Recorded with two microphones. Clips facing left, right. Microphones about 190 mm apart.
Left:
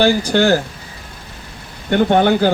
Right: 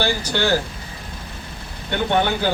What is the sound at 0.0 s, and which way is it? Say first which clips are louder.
Speech: left 8 dB; 50° left (ahead or behind).